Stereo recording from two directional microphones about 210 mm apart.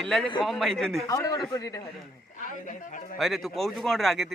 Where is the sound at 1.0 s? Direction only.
15° left (ahead or behind).